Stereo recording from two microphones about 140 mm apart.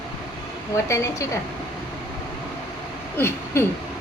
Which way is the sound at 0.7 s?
20° left (ahead or behind).